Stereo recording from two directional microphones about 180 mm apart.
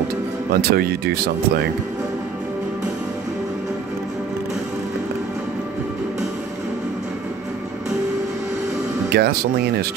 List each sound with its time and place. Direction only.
0.5 s speech: 60° right (ahead or behind)
9.1 s speech: 60° right (ahead or behind)